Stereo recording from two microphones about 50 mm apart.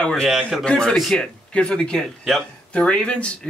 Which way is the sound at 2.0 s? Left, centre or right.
Centre.